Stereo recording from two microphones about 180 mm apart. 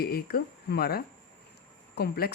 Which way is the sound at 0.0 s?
60° left (ahead or behind).